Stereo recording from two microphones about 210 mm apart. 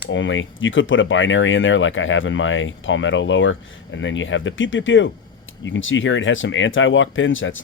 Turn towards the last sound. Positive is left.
turn(degrees=65)  # may be behind; listen again after turning